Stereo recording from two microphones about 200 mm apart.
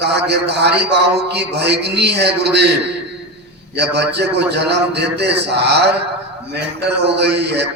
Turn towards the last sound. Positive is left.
turn(degrees=-55)  # may be behind; listen again after turning